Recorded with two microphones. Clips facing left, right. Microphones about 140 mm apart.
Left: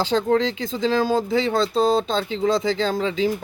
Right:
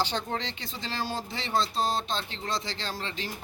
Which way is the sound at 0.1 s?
80° left.